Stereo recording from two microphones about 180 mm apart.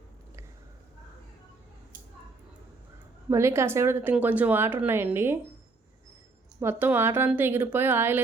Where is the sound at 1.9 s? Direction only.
50° right (ahead or behind).